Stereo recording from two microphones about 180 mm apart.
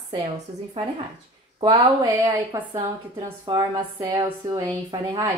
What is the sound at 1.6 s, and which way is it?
A woman's voice, 25° right (ahead or behind).